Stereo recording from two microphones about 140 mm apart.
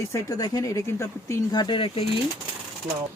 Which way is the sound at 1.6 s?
40° left (ahead or behind).